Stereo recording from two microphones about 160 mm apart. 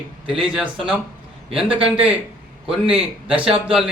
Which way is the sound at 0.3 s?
35° right (ahead or behind).